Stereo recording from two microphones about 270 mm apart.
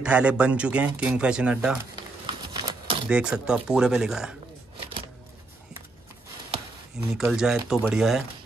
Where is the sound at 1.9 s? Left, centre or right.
Centre.